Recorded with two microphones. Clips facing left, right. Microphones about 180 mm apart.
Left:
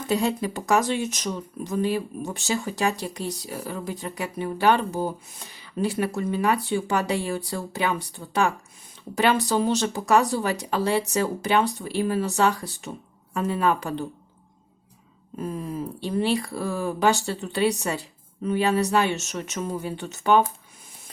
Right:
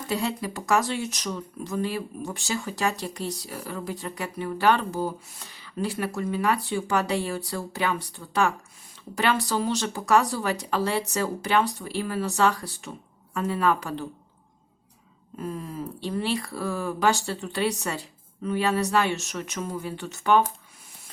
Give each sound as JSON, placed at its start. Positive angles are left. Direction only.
{"t": 0.1, "sound": "speech", "side_deg": 20}
{"t": 15.4, "sound": "speech", "side_deg": 15}